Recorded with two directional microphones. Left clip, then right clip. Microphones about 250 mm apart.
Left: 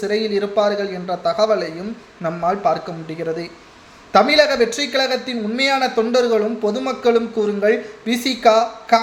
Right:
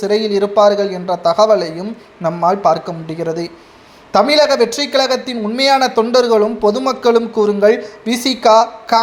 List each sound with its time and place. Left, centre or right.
0.0 s a man's voice: centre